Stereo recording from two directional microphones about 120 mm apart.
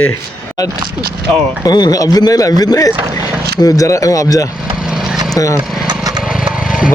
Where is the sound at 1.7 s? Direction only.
35° left (ahead or behind).